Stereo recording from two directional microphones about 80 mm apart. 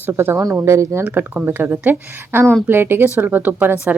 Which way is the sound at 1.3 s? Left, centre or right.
Centre.